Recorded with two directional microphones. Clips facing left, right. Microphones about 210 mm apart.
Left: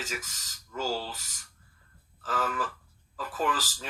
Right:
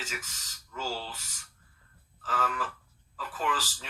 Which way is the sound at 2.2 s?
40° left (ahead or behind).